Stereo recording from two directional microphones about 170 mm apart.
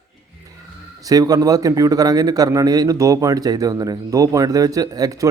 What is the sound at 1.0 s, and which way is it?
Speech, 20° right (ahead or behind).